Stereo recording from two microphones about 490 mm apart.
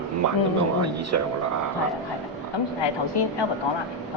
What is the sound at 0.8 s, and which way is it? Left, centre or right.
Speech, right.